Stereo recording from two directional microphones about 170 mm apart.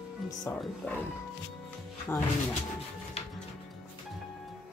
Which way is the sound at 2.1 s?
15° left (ahead or behind).